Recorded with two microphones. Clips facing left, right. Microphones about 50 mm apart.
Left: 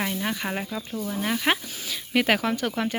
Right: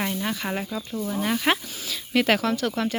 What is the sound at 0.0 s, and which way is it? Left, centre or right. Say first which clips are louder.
Speech: even; centre.